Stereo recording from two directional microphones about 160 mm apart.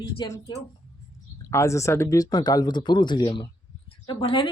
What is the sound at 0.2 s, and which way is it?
Speech, 25° left (ahead or behind).